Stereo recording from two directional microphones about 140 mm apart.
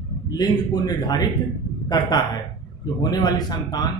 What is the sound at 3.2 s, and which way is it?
Speech, 30° left (ahead or behind).